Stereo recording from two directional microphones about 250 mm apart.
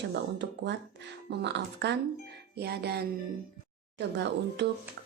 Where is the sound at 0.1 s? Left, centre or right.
Right.